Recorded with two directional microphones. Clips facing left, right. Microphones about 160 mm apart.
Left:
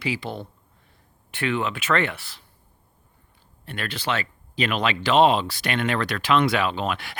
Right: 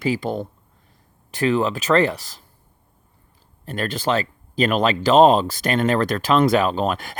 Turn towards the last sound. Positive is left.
turn(degrees=-40)  # may be behind; listen again after turning